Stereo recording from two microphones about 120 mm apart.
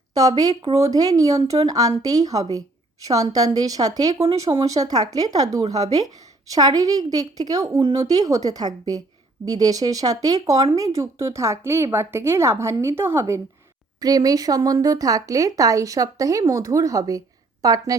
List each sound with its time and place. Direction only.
0.1 s a woman's voice: 30° right (ahead or behind)